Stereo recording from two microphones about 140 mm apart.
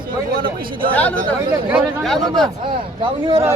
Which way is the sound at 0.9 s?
10° left (ahead or behind).